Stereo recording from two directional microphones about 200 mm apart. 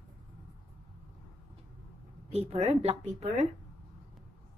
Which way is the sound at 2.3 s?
30° right (ahead or behind).